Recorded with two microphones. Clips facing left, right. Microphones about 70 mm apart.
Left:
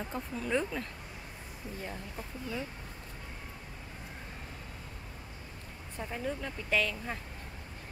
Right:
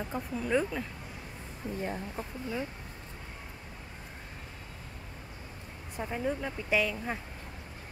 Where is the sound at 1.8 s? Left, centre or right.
Right.